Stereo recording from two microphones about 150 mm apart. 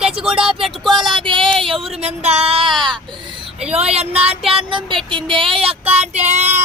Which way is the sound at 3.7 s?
45° right (ahead or behind).